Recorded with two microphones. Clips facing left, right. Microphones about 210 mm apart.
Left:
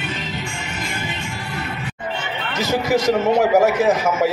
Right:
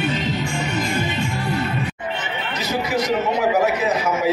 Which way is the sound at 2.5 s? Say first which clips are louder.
Left 4 dB; 45° left (ahead or behind).